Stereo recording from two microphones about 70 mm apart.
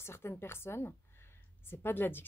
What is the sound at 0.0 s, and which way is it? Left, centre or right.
Speech, left.